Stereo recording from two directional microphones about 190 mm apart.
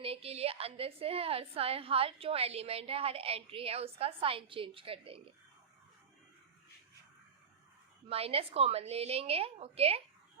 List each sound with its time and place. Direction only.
0.0 s a woman's voice: 30° right (ahead or behind)
8.1 s a woman's voice: 30° right (ahead or behind)